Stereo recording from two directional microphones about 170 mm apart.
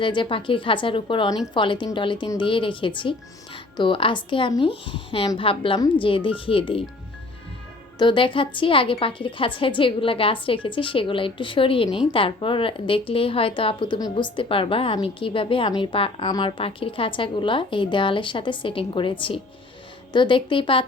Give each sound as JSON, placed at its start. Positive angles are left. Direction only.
{"t": 0.0, "sound": "speech", "side_deg": 30}
{"t": 7.9, "sound": "a woman's voice", "side_deg": 30}